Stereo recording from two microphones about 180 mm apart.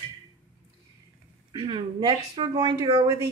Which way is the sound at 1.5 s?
25° right (ahead or behind).